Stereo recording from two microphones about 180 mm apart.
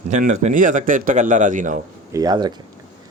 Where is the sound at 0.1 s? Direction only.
40° right (ahead or behind).